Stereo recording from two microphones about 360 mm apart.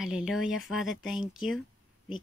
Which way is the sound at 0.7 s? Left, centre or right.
Centre.